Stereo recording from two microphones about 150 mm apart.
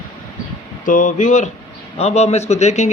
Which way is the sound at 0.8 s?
55° left (ahead or behind).